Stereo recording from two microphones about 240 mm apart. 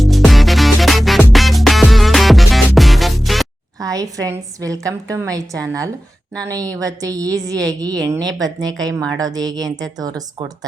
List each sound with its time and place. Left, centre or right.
0.0 s music: centre
3.8 s a woman's voice: centre